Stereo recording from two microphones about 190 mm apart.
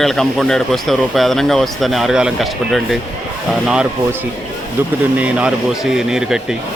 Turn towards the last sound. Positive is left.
turn(degrees=-5)  # may be behind; listen again after turning